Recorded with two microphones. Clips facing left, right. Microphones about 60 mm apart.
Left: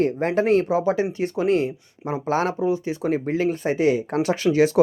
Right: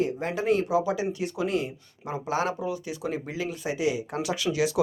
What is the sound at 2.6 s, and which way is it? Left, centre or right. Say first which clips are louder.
Speech: left 8 dB; left.